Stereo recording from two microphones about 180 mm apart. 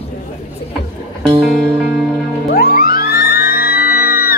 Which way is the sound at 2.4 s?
55° left (ahead or behind).